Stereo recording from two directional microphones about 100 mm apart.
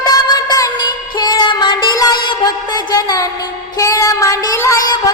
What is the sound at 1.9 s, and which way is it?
Music, 40° left (ahead or behind).